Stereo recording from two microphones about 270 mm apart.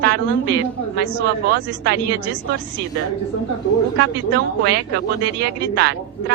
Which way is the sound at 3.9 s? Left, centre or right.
Right.